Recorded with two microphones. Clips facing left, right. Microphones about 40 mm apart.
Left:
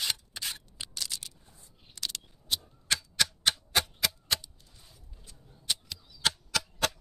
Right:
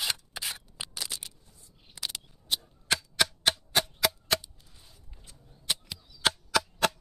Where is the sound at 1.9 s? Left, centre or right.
Centre.